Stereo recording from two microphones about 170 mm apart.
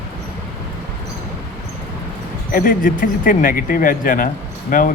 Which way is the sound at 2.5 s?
55° left (ahead or behind).